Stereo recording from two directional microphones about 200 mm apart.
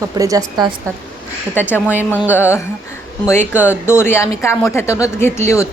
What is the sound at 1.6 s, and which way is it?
Speech, 10° left (ahead or behind).